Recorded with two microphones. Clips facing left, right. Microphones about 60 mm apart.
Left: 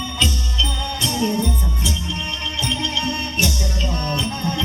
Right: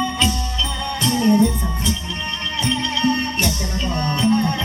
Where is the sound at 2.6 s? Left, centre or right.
Right.